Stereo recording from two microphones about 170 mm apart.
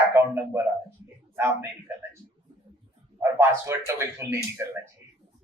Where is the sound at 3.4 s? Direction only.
15° right (ahead or behind).